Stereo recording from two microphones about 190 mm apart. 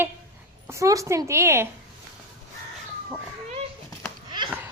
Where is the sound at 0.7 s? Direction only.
15° right (ahead or behind).